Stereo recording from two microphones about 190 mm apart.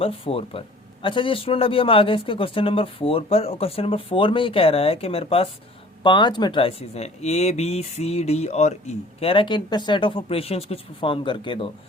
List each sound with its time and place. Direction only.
0.0 s speech: 30° left (ahead or behind)